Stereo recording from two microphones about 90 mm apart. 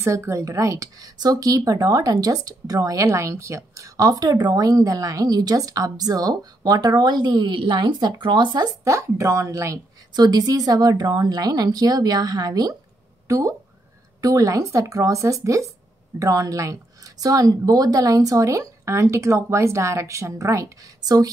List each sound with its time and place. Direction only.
0.0 s a woman's voice: 35° right (ahead or behind); by 8.7 s 55° right (ahead or behind)
8.8 s a woman's voice: 35° right (ahead or behind)
10.1 s a woman's voice: 50° right (ahead or behind)